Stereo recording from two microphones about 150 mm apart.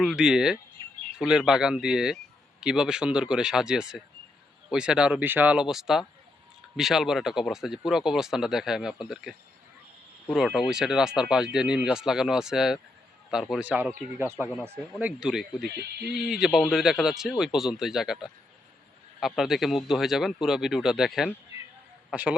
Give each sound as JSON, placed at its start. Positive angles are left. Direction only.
{"t": 0.0, "sound": "speech", "side_deg": -5}
{"t": 10.3, "sound": "speech", "side_deg": 0}